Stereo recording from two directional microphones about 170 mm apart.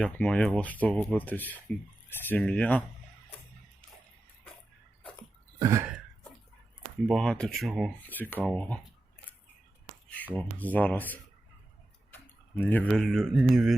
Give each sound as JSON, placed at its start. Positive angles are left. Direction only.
{"t": 0.0, "sound": "speech", "side_deg": 5}
{"t": 5.5, "sound": "throat clearing", "side_deg": -20}
{"t": 7.1, "sound": "speech", "side_deg": 5}
{"t": 8.0, "sound": "speech", "side_deg": 10}
{"t": 10.3, "sound": "speech", "side_deg": 10}